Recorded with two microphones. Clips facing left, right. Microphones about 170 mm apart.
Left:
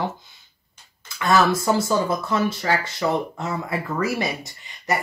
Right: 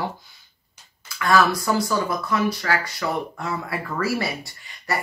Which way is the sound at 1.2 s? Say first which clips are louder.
Left 1 dB; 20° left (ahead or behind).